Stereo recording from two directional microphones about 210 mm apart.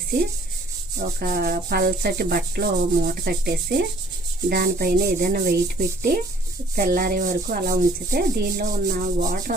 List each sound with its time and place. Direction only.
0.9 s rub: 45° right (ahead or behind)